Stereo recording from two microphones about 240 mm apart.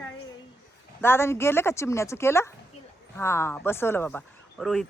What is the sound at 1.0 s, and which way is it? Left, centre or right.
Speech, centre.